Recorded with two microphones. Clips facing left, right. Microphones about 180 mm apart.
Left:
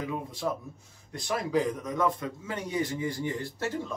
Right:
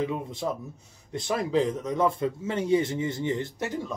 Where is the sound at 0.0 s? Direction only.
25° right (ahead or behind).